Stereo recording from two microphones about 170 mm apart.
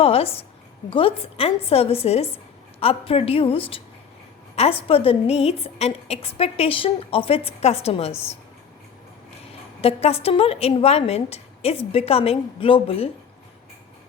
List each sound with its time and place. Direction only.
0.0 s a woman's voice: 35° left (ahead or behind)
9.8 s a woman's voice: 35° left (ahead or behind)